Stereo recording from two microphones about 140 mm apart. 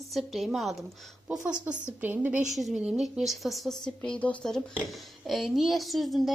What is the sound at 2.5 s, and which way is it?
A woman's voice, centre (ahead or behind).